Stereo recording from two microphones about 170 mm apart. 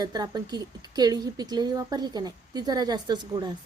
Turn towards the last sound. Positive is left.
turn(degrees=-25)  # may be behind; listen again after turning